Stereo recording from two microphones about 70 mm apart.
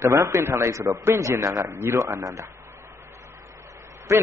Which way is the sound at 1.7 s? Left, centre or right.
Right.